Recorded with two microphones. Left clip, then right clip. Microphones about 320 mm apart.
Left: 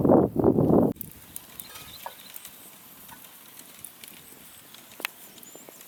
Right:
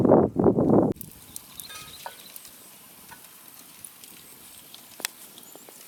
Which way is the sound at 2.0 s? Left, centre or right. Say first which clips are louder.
Even; centre.